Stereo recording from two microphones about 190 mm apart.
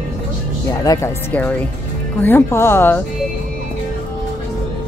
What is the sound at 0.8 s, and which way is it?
Speech, 20° left (ahead or behind).